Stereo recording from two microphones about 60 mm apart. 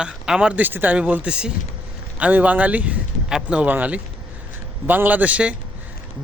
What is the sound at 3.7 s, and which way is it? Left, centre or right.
Speech, right.